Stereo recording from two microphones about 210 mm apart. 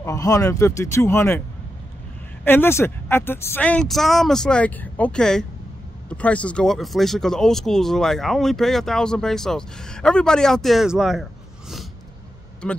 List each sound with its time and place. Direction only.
0.0 s speech: 15° left (ahead or behind)
2.4 s speech: 10° left (ahead or behind)
12.6 s speech: 5° left (ahead or behind)